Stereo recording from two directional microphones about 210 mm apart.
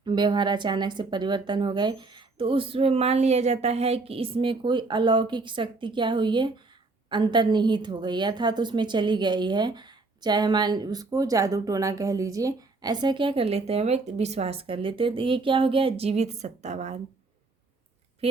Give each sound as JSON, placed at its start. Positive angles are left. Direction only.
{"t": 0.0, "sound": "a woman's voice", "side_deg": -20}
{"t": 18.2, "sound": "speech", "side_deg": -25}